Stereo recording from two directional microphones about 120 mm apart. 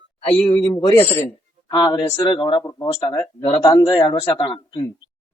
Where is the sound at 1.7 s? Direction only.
35° left (ahead or behind).